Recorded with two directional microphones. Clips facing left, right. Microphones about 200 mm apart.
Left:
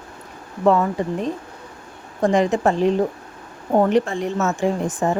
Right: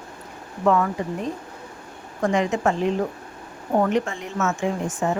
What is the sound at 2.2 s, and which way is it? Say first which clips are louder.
Speech: left 4 dB; 35° left (ahead or behind).